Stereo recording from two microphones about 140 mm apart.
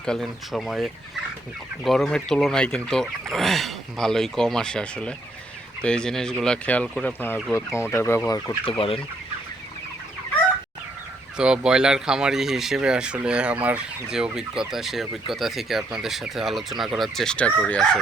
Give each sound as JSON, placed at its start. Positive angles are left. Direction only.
{"t": 0.0, "sound": "speech", "side_deg": 5}
{"t": 7.8, "sound": "fowl", "side_deg": 20}
{"t": 8.6, "sound": "chicken", "side_deg": 40}
{"t": 11.3, "sound": "speech", "side_deg": -5}